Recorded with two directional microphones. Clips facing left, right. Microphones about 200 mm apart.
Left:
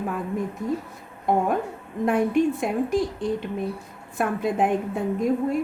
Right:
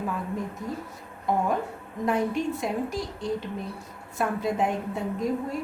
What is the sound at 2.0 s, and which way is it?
A woman's voice, 55° left (ahead or behind).